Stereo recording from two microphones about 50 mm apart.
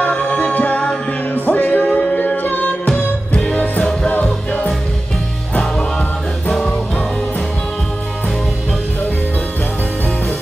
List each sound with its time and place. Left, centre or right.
0.1 s music: left
2.9 s music: centre
4.1 s music: left